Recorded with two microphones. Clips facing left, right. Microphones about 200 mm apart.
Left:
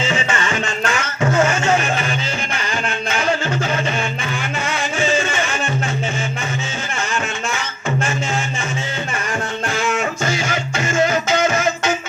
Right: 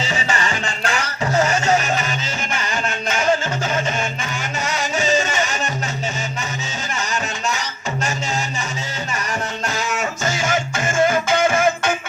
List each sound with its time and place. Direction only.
0.1 s music: 40° right (ahead or behind)
4.7 s music: 40° right (ahead or behind)
9.6 s music: 50° left (ahead or behind)
10.2 s music: 45° right (ahead or behind)